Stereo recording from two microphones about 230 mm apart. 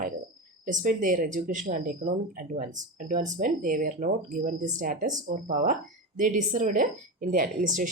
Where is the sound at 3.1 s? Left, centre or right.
Right.